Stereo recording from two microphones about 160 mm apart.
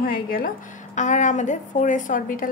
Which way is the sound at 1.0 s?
50° left (ahead or behind).